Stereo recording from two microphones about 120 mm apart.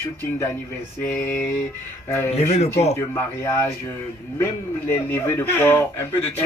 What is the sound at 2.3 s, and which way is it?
Speech, 65° left (ahead or behind).